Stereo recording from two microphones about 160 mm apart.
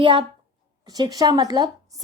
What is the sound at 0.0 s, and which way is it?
A woman's voice, 35° right (ahead or behind).